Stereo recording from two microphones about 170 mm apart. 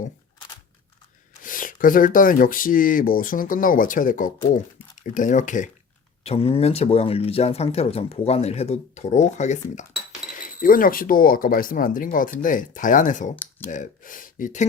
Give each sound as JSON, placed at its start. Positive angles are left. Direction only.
{"t": 1.4, "sound": "speech", "side_deg": 55}
{"t": 6.2, "sound": "speech", "side_deg": 35}
{"t": 10.4, "sound": "speech", "side_deg": 55}
{"t": 13.3, "sound": "speech", "side_deg": 10}
{"t": 13.7, "sound": "speech", "side_deg": 50}